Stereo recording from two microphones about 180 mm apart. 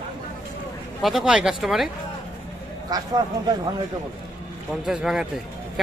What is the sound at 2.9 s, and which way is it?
Speech, 20° right (ahead or behind).